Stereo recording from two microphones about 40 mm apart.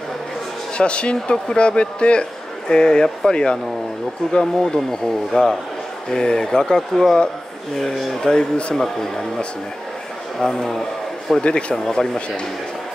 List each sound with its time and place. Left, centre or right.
0.7 s speech: left
4.3 s speech: centre
6.1 s speech: left
8.2 s speech: left
8.7 s speech: centre
10.4 s speech: centre